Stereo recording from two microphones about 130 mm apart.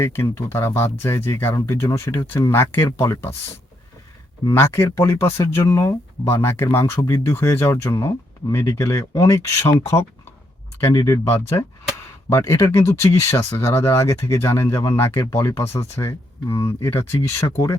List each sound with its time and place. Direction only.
0.0 s speech: 20° left (ahead or behind)
4.4 s speech: 20° left (ahead or behind)